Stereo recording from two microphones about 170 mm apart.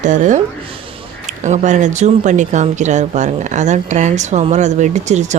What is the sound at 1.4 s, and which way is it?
A woman's voice, 45° right (ahead or behind).